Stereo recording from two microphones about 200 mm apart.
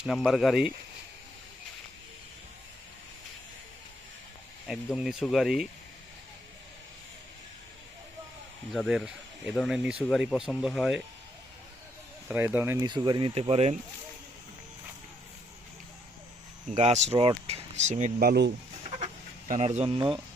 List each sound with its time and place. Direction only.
0.0 s speech: centre (ahead or behind)
4.6 s speech: centre (ahead or behind)
8.7 s speech: centre (ahead or behind)
12.3 s speech: 10° right (ahead or behind); by 13.7 s 30° right (ahead or behind)
16.7 s speech: 35° right (ahead or behind); by 18.5 s 55° right (ahead or behind)
18.9 s chicken: 35° right (ahead or behind)